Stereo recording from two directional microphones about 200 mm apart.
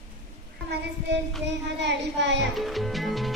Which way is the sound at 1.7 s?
60° right (ahead or behind).